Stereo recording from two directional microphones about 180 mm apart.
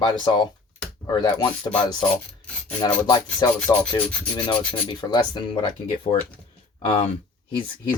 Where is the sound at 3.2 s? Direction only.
10° left (ahead or behind).